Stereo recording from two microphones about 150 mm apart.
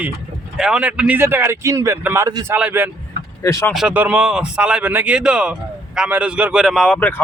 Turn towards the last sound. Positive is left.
turn(degrees=10)  # may be behind; listen again after turning